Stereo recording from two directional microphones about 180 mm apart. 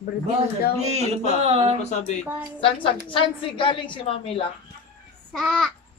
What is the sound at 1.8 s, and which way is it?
A woman's voice, 40° left (ahead or behind).